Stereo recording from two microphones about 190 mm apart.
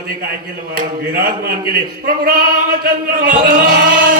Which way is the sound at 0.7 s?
50° right (ahead or behind).